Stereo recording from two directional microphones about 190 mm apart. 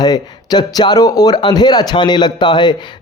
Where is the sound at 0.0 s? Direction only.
20° left (ahead or behind).